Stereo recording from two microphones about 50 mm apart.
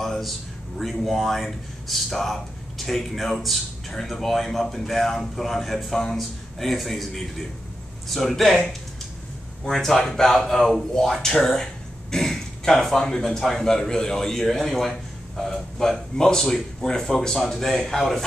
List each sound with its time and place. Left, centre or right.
0.0 s a man's voice: centre
9.7 s speech: centre